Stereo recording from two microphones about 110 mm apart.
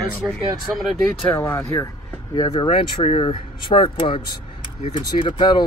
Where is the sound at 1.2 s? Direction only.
20° left (ahead or behind).